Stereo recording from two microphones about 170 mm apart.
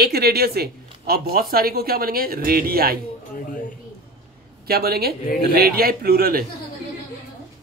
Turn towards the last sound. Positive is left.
turn(degrees=-60)  # may be behind; listen again after turning